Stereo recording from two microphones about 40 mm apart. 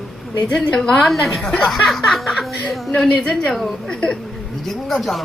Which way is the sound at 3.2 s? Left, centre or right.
Centre.